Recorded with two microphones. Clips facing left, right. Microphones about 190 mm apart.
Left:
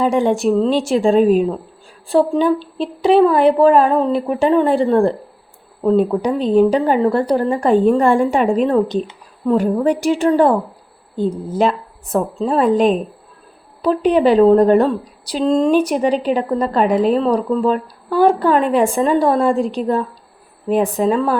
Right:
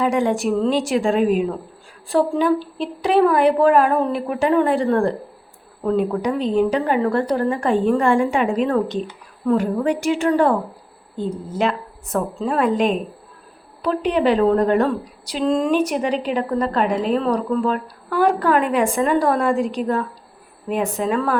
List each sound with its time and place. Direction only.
0.0 s a woman's voice: 30° left (ahead or behind)
8.7 s a woman's voice: 25° left (ahead or behind)